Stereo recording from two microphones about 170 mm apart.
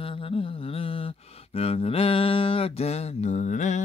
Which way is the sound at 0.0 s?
30° left (ahead or behind).